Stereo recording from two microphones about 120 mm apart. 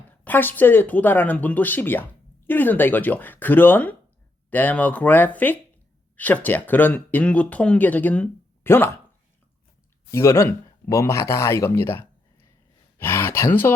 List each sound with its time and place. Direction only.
0.1 s speech: 15° left (ahead or behind)
10.1 s speech: 20° left (ahead or behind)